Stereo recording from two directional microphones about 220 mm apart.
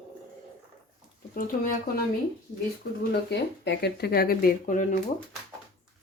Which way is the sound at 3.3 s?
50° left (ahead or behind).